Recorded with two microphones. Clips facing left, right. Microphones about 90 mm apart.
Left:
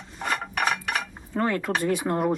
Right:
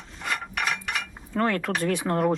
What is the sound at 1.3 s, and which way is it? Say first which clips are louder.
Speech: even; 10° left (ahead or behind).